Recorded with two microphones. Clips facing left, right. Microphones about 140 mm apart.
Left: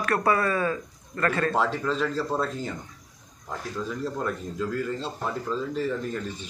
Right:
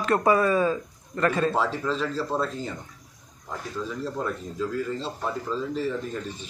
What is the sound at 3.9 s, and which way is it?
Speech, centre (ahead or behind).